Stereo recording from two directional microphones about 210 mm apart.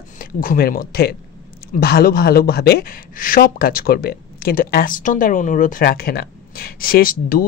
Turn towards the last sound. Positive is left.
turn(degrees=40)  # may be behind; listen again after turning